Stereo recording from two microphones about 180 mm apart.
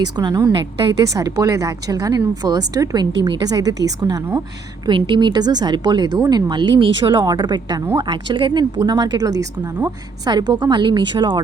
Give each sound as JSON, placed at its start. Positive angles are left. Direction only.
{"t": 0.0, "sound": "a woman's voice", "side_deg": -20}